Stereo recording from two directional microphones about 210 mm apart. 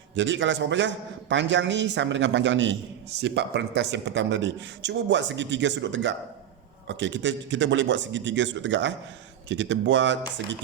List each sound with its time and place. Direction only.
0.2 s a man's voice: 60° right (ahead or behind)